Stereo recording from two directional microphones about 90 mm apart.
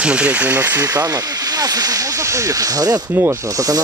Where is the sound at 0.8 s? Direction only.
40° right (ahead or behind).